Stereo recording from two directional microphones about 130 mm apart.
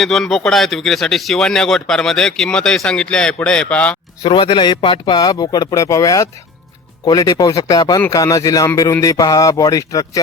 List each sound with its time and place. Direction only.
0.0 s speech: centre (ahead or behind)
4.2 s speech: 40° left (ahead or behind)